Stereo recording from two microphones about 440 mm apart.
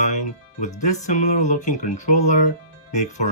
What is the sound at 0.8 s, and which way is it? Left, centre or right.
Speech, left.